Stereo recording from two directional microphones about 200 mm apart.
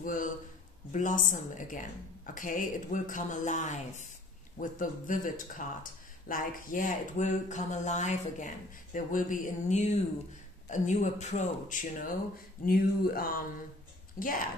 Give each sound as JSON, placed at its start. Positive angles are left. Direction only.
{"t": 0.0, "sound": "a man's voice", "side_deg": 40}